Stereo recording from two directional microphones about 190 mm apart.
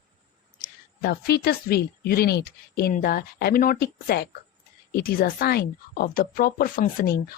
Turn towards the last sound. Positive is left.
turn(degrees=50)  # may be behind; listen again after turning